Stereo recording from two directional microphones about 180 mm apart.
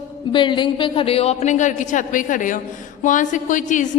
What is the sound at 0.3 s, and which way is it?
A woman's voice, 25° left (ahead or behind).